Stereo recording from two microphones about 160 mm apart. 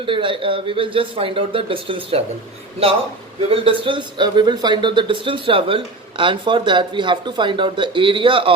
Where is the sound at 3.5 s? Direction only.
35° right (ahead or behind).